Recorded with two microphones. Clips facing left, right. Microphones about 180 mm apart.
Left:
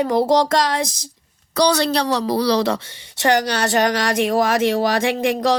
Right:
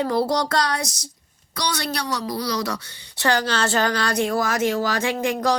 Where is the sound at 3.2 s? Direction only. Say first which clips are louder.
Left 4 dB; 20° left (ahead or behind).